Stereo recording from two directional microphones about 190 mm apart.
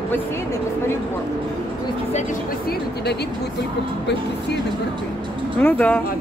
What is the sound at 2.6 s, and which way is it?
Speech, 60° left (ahead or behind).